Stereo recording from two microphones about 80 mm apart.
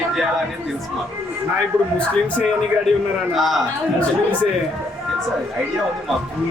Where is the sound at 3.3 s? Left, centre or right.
Centre.